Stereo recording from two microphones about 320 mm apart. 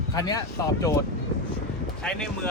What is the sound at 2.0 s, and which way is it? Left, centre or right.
Speech, centre.